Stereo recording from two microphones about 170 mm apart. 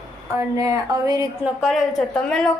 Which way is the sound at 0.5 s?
20° right (ahead or behind).